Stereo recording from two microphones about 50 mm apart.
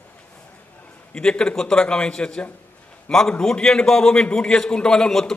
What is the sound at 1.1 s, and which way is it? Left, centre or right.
A man's voice, centre.